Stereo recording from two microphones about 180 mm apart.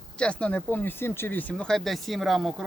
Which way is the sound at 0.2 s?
5° left (ahead or behind).